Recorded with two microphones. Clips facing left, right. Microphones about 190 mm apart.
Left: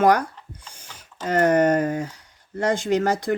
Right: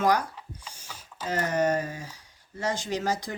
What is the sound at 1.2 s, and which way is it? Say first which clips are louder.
Speech: left 8 dB; 55° left (ahead or behind).